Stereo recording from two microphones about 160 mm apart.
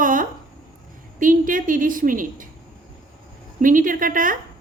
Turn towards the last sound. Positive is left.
turn(degrees=-55)  # may be behind; listen again after turning